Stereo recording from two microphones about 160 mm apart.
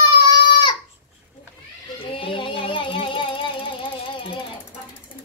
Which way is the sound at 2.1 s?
35° left (ahead or behind).